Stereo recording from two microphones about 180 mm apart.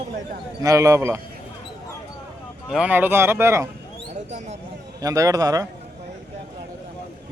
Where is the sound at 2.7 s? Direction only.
10° right (ahead or behind).